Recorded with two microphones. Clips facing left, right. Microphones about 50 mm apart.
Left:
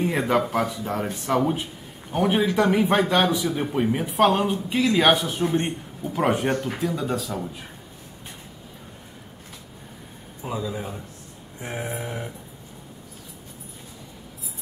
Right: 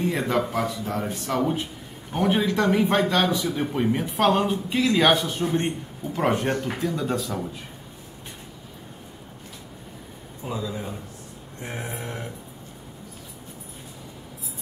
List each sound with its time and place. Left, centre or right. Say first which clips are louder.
0.0 s a man's voice: left 2 dB; centre
1.4 s a man's voice: left 1 dB; centre
10.4 s a man's voice: left 1 dB; centre